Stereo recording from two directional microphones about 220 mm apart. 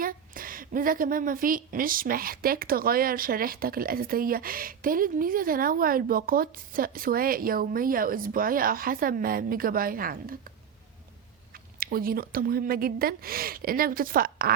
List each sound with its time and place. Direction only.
0.0 s a woman's voice: 40° right (ahead or behind)
11.8 s a woman's voice: 40° right (ahead or behind)